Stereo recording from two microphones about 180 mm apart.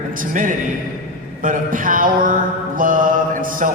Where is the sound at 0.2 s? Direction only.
50° right (ahead or behind).